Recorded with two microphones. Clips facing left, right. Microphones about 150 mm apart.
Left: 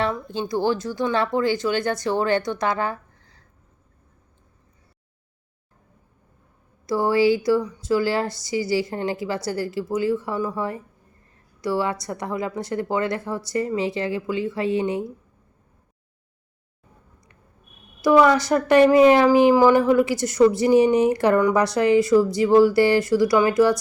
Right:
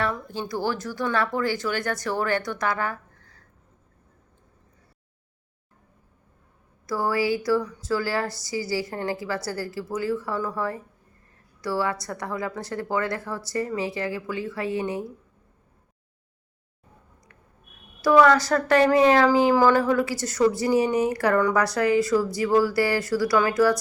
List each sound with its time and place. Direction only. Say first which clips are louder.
0.0 s a woman's voice: left 3 dB; 25° left (ahead or behind)
6.8 s a woman's voice: left 6 dB; 25° left (ahead or behind)
18.0 s a woman's voice: left 1 dB; 15° left (ahead or behind)